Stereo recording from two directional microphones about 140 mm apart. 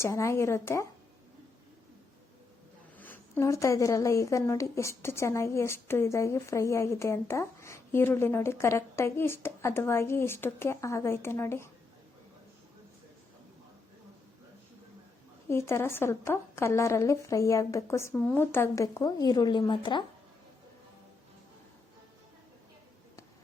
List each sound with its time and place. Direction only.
0.0 s speech: 20° left (ahead or behind)
3.0 s speech: 15° left (ahead or behind)
15.4 s speech: 20° left (ahead or behind); by 20.1 s 35° left (ahead or behind)